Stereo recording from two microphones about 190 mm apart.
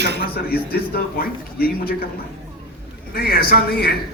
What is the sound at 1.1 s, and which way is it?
Speech, 55° left (ahead or behind).